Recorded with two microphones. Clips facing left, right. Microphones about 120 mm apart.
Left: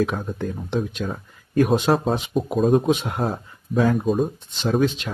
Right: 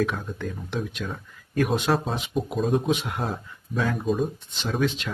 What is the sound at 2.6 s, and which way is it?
Speech, 45° left (ahead or behind).